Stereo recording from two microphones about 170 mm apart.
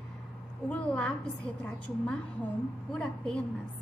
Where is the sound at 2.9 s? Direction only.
5° left (ahead or behind).